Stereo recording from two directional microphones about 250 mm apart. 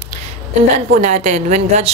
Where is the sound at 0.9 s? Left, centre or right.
Right.